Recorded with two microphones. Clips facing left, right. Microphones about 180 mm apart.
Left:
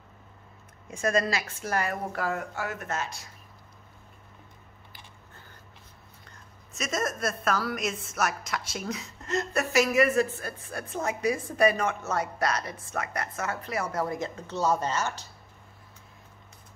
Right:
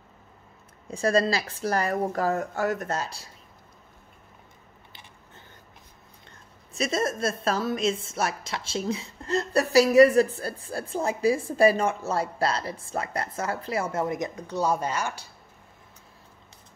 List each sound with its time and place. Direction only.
0.8 s speech: 35° right (ahead or behind)
6.7 s speech: 30° right (ahead or behind); by 15.2 s 10° right (ahead or behind)